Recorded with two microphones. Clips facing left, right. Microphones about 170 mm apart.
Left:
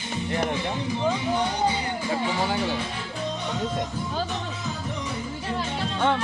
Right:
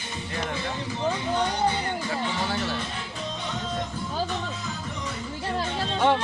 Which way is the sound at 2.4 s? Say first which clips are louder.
Left 3 dB; 15° left (ahead or behind).